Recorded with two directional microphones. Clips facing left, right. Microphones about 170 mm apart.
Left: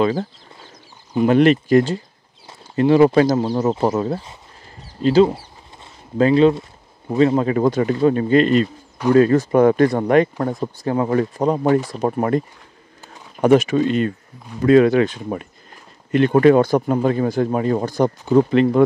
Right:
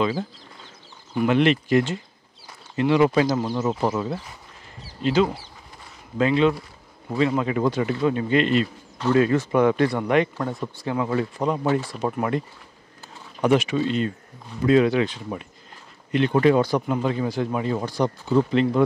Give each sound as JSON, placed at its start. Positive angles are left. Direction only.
{"t": 1.2, "sound": "speech", "side_deg": 45}